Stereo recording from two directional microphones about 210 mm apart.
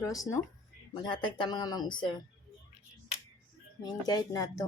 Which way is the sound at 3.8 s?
20° left (ahead or behind).